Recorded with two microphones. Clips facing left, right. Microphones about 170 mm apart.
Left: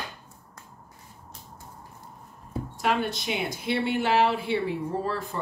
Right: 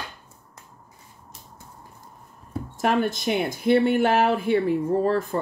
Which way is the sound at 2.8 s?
50° right (ahead or behind).